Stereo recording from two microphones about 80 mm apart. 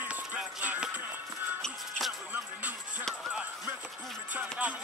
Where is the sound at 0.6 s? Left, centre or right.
Centre.